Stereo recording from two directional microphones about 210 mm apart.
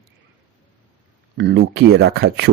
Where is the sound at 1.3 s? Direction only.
55° right (ahead or behind).